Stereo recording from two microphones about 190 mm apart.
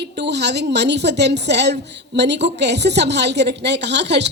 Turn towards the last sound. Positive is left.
turn(degrees=-65)  # may be behind; listen again after turning